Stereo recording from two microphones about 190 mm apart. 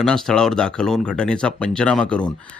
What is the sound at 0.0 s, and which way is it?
Speech, centre (ahead or behind).